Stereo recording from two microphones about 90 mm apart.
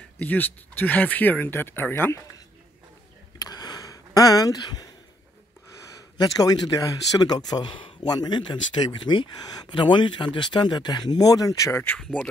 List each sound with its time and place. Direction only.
0.2 s speech: 20° left (ahead or behind)
3.3 s a sound: 50° left (ahead or behind)
6.1 s speech: 45° left (ahead or behind)
11.7 s speech: 25° left (ahead or behind)